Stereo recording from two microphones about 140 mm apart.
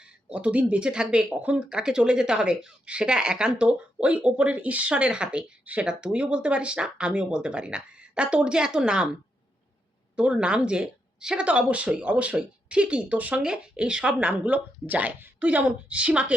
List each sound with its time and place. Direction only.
0.3 s speech: 10° right (ahead or behind)
10.2 s speech: 5° right (ahead or behind)